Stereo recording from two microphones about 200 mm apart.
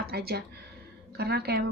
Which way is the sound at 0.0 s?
50° right (ahead or behind).